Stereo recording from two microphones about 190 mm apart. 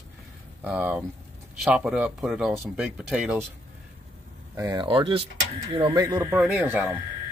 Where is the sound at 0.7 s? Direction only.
5° right (ahead or behind).